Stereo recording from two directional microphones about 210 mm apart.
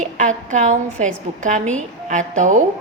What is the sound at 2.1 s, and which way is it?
Speech, 35° right (ahead or behind).